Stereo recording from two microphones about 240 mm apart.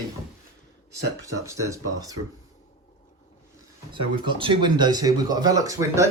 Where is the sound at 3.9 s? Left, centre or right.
Right.